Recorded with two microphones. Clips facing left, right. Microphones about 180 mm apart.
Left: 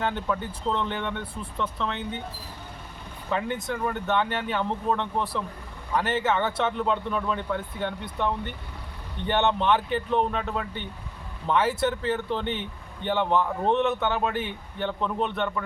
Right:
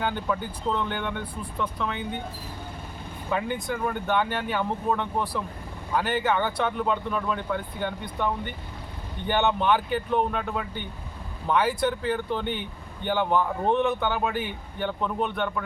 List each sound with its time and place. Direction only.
0.0 s speech: centre (ahead or behind)
3.2 s speech: 5° right (ahead or behind)